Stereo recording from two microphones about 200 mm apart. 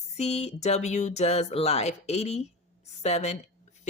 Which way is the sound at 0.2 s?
35° left (ahead or behind).